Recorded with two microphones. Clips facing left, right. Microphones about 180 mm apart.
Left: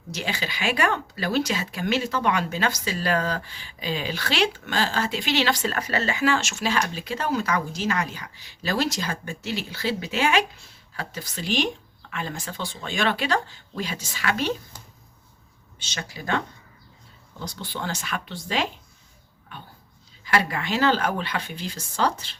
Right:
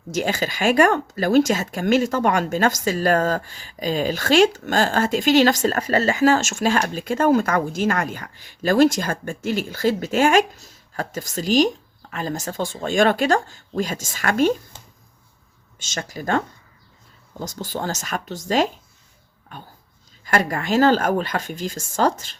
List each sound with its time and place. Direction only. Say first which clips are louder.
0.1 s speech: right 8 dB; 45° right (ahead or behind)
14.7 s a sound: right 1 dB; 25° right (ahead or behind)
15.8 s speech: right 6 dB; 45° right (ahead or behind)
17.4 s speech: right 5 dB; 45° right (ahead or behind)